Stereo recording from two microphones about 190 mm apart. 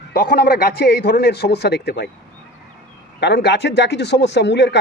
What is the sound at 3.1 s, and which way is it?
A man's voice, 60° left (ahead or behind).